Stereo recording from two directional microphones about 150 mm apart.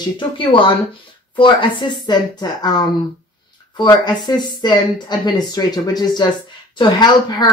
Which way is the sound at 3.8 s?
30° left (ahead or behind).